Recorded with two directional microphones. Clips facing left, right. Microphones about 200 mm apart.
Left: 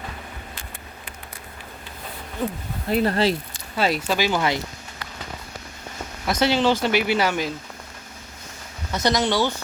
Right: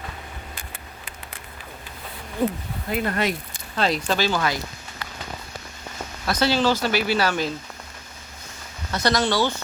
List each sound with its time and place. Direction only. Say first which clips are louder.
2.9 s speech: left 4 dB; 30° left (ahead or behind)
3.8 s speech: left 1 dB; 5° left (ahead or behind)
4.2 s speech: left 1 dB; 20° left (ahead or behind)
6.2 s speech: left 1 dB; 20° left (ahead or behind)
8.9 s speech: left 1 dB; 20° left (ahead or behind)